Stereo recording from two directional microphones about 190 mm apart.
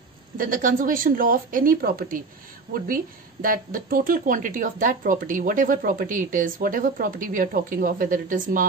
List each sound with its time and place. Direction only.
0.4 s speech: 45° right (ahead or behind)
3.4 s speech: 45° right (ahead or behind)